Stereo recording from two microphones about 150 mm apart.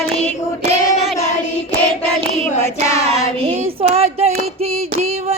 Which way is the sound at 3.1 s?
40° right (ahead or behind).